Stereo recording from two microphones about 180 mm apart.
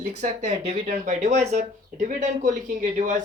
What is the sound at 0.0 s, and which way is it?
Speech, 40° right (ahead or behind).